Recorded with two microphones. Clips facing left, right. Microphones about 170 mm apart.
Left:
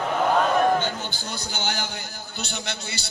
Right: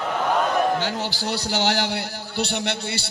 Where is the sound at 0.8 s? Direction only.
80° right.